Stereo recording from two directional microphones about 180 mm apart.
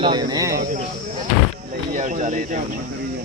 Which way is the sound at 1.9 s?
45° right (ahead or behind).